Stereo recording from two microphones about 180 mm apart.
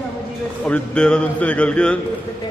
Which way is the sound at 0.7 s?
5° left (ahead or behind).